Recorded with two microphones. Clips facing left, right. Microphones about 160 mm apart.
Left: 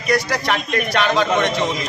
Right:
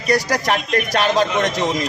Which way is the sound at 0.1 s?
40° right (ahead or behind).